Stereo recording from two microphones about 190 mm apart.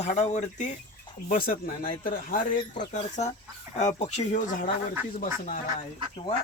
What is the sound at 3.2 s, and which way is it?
Speech, 35° left (ahead or behind).